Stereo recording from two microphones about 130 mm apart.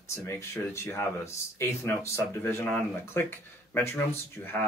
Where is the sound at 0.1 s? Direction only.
20° left (ahead or behind).